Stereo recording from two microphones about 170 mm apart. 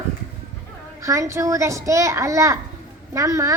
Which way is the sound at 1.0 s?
20° right (ahead or behind).